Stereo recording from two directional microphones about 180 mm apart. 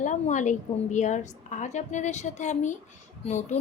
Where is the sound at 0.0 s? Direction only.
45° left (ahead or behind).